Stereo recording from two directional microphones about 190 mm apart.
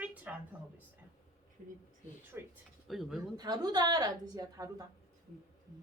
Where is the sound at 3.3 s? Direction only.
20° right (ahead or behind).